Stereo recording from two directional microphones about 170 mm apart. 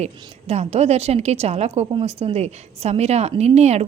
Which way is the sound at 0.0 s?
40° right (ahead or behind).